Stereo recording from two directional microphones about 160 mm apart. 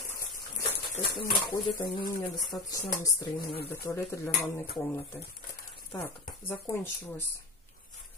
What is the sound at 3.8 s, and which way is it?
Speech, 15° left (ahead or behind).